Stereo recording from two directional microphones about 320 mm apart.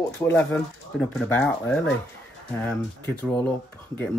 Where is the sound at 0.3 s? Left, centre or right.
Centre.